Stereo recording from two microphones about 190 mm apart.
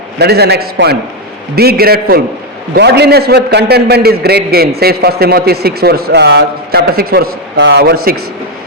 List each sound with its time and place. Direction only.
0.2 s a man's voice: 60° right (ahead or behind)